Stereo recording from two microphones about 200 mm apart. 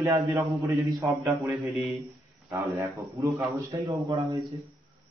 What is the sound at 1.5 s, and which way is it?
Speech, centre (ahead or behind).